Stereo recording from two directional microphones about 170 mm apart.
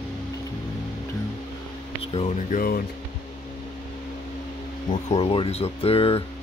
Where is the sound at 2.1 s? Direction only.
45° left (ahead or behind).